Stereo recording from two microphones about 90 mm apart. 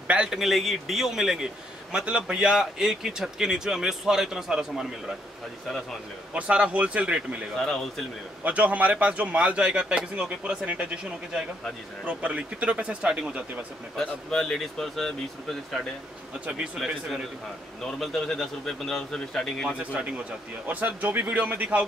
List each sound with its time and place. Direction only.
0.1 s a man's voice: 10° right (ahead or behind)
6.3 s speech: 15° right (ahead or behind)
13.9 s a man's voice: 5° left (ahead or behind)
16.7 s a man's voice: centre (ahead or behind)
19.8 s a man's voice: 15° right (ahead or behind)